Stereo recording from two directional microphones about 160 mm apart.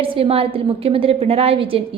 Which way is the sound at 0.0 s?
35° right (ahead or behind).